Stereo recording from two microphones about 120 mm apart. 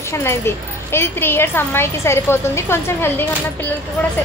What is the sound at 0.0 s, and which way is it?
Speech, 20° left (ahead or behind).